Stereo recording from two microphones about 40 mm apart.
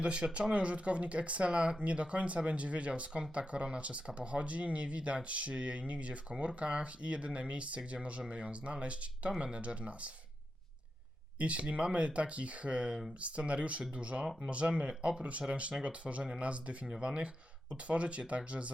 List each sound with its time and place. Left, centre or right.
0.0 s speech: right
11.3 s speech: right
16.8 s speech: centre